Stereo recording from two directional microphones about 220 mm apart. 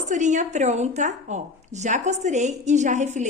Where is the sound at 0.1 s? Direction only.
35° right (ahead or behind).